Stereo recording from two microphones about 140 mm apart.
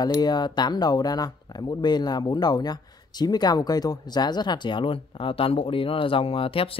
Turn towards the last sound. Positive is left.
turn(degrees=40)  # may be behind; listen again after turning